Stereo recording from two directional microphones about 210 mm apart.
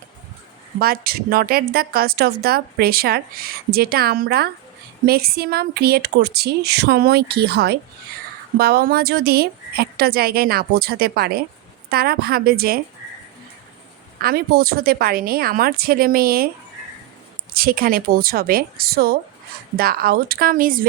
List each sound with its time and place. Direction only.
0.8 s a woman's voice: 45° right (ahead or behind)
14.2 s a woman's voice: 45° right (ahead or behind)
17.5 s a woman's voice: 45° right (ahead or behind)